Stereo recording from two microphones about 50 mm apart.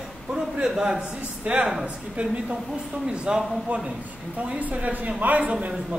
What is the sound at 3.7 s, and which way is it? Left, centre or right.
Speech, right.